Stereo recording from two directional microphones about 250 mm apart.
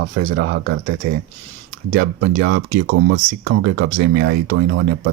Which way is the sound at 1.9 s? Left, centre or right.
Right.